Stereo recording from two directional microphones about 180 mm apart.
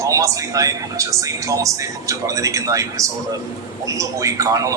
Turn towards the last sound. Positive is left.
turn(degrees=-15)  # may be behind; listen again after turning